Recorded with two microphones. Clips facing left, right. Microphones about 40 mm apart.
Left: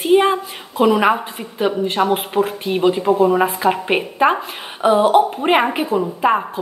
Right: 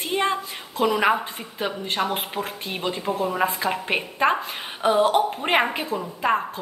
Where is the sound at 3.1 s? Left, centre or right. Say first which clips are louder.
Left 10 dB; left.